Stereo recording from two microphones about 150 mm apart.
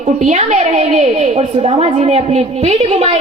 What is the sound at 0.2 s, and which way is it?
A woman's voice, 50° right (ahead or behind).